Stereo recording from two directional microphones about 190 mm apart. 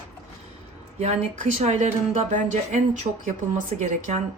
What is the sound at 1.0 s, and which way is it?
Speech, 35° right (ahead or behind).